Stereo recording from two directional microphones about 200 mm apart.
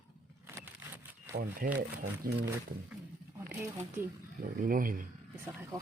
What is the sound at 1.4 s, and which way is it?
Speech, 45° right (ahead or behind).